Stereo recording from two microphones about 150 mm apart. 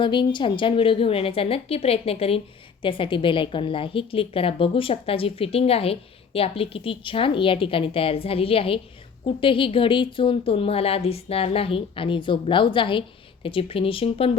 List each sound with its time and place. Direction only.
0.0 s a woman's voice: 30° left (ahead or behind)